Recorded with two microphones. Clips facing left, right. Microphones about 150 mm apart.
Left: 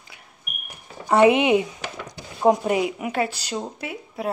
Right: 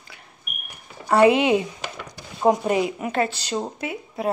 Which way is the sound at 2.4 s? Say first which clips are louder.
Even; 10° left (ahead or behind).